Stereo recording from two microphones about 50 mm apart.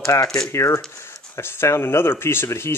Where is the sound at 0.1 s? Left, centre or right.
Left.